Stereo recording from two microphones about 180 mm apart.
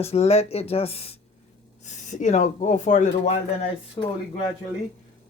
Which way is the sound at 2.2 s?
40° left (ahead or behind).